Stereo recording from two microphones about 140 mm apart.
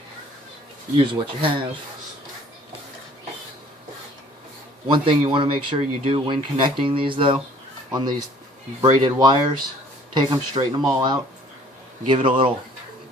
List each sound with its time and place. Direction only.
0.9 s speech: 35° right (ahead or behind)
4.9 s speech: 35° right (ahead or behind)